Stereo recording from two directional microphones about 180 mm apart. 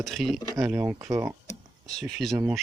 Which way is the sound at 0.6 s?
15° right (ahead or behind).